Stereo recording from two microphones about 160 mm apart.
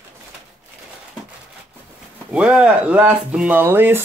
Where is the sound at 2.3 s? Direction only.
5° right (ahead or behind).